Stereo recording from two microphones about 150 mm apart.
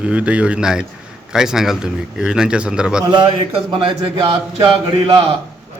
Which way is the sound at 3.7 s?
35° right (ahead or behind).